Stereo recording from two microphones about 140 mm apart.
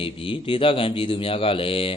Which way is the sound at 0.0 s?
40° left (ahead or behind).